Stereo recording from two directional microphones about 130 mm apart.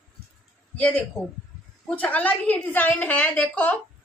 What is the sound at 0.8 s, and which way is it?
A woman's voice, 10° left (ahead or behind).